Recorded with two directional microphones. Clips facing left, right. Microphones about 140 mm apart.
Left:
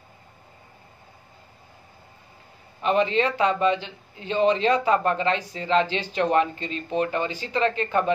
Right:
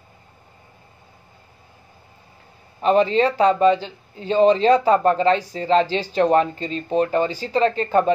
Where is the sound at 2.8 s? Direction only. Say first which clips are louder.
Right 5 dB; 35° right (ahead or behind).